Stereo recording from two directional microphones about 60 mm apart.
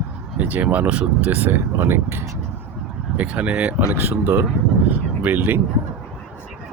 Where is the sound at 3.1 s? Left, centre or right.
Right.